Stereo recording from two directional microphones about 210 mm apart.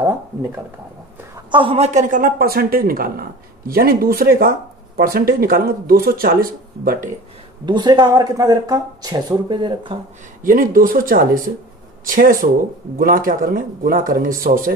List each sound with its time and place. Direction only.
1.3 s speech: 25° right (ahead or behind); by 7.0 s 45° right (ahead or behind)
7.6 s speech: 20° right (ahead or behind)
10.4 s speech: 40° right (ahead or behind)